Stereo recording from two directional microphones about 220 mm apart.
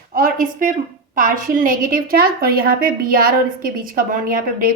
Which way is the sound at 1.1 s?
40° right (ahead or behind).